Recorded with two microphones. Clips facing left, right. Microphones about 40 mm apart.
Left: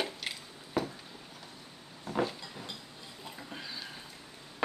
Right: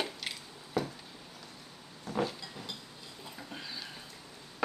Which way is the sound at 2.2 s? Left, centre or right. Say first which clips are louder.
Left 1 dB; centre.